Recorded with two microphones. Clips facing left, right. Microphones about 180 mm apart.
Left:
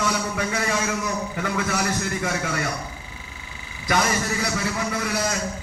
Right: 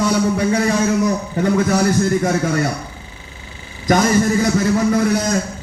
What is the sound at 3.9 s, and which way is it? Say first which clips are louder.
A man's voice: right 9 dB; 40° right (ahead or behind).